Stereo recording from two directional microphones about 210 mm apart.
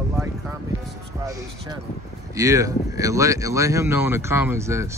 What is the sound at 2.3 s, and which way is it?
Speech, 15° right (ahead or behind).